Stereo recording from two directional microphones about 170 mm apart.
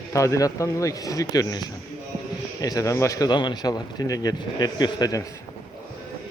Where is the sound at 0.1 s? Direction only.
20° left (ahead or behind).